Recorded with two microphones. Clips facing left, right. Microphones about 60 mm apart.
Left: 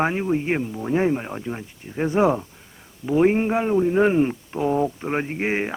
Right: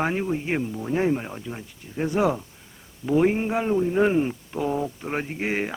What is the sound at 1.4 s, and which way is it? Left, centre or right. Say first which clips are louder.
Speech: left 5 dB; left.